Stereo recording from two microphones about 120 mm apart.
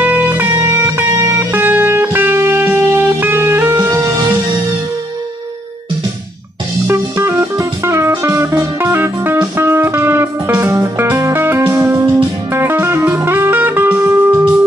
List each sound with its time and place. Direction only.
0.0 s music: 15° right (ahead or behind)
6.9 s music: 20° right (ahead or behind)